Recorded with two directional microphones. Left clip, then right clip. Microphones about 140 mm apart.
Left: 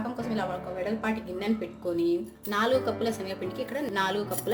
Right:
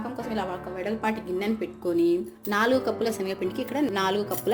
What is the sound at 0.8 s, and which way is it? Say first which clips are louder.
Speech: right 3 dB; 40° right (ahead or behind).